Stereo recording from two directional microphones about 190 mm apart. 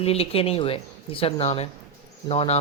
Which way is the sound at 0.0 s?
30° left (ahead or behind).